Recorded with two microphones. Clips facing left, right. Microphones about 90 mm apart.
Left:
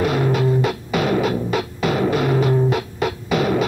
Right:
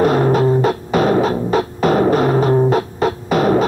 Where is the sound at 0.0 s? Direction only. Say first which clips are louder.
Right 5 dB; 40° right (ahead or behind).